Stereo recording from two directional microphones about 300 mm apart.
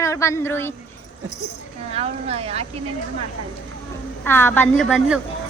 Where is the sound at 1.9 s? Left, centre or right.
Centre.